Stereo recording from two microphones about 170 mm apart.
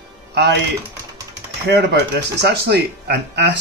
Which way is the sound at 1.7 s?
80° right.